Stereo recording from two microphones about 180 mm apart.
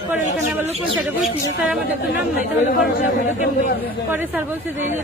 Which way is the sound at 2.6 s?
40° left (ahead or behind).